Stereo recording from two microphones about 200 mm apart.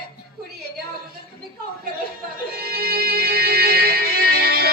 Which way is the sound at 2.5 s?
50° right (ahead or behind).